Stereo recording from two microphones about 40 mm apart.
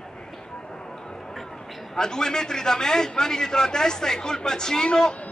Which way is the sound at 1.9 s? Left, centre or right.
Centre.